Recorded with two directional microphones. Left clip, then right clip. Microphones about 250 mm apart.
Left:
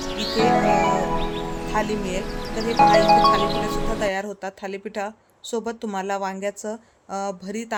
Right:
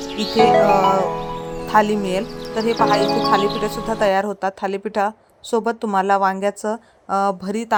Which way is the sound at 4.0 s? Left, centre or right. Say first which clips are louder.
Right 7 dB; centre.